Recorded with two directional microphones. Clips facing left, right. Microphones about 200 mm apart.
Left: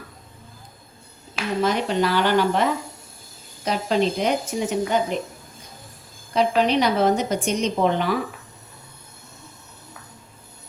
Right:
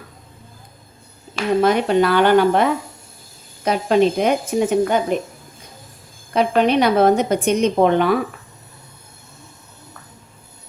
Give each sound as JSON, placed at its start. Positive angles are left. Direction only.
{"t": 1.6, "sound": "a woman's voice", "side_deg": -55}
{"t": 6.3, "sound": "a woman's voice", "side_deg": -55}